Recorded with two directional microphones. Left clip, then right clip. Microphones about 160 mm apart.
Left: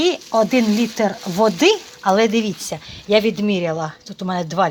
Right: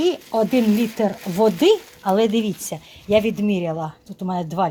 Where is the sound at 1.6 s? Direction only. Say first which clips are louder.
Left 1 dB; 5° right (ahead or behind).